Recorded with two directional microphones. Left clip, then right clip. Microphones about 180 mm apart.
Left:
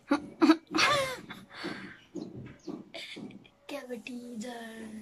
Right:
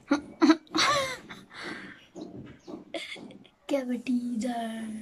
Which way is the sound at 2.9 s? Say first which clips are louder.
Right 6 dB; 45° right (ahead or behind).